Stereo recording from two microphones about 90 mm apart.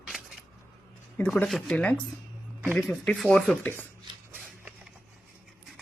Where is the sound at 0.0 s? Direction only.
10° right (ahead or behind).